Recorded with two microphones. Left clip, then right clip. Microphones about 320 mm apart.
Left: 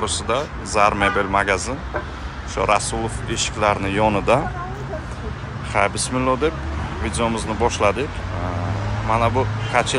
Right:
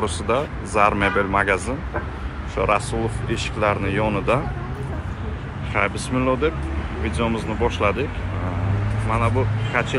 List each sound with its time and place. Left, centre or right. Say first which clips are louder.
0.0 s speech: even; centre
5.7 s speech: left 3 dB; centre
9.1 s speech: left 4 dB; centre